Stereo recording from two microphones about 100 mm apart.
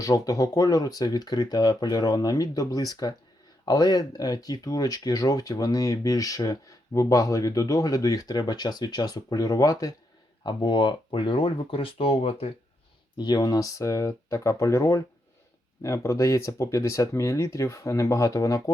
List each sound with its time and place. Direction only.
0.0 s speech: 35° left (ahead or behind)
10.4 s speech: 50° left (ahead or behind); by 12.5 s 75° left (ahead or behind)
13.1 s speech: 45° left (ahead or behind)